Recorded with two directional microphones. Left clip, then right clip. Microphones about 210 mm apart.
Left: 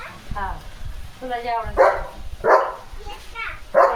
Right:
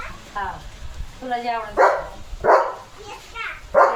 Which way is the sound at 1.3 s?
45° right (ahead or behind).